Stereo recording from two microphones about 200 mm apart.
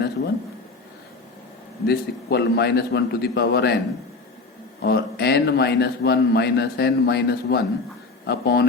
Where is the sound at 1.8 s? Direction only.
55° left (ahead or behind).